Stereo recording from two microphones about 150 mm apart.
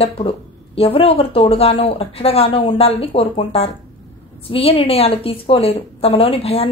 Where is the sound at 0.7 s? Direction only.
40° left (ahead or behind).